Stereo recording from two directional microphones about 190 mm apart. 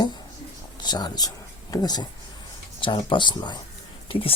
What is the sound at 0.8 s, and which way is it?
Speech, 20° left (ahead or behind).